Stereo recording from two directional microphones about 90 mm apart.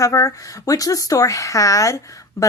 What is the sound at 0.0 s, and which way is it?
Speech, 35° left (ahead or behind).